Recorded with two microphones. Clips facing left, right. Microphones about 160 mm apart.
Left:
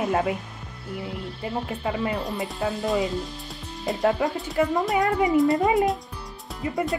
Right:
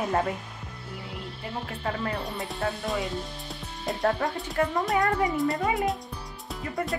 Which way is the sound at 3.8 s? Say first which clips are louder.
Left 3 dB; centre (ahead or behind).